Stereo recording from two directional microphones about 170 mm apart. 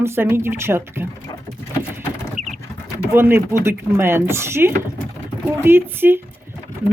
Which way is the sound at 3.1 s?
15° right (ahead or behind).